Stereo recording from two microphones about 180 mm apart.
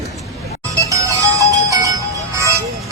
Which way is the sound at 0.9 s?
20° right (ahead or behind).